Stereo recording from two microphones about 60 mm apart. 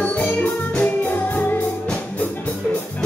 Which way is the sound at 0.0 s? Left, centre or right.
Left.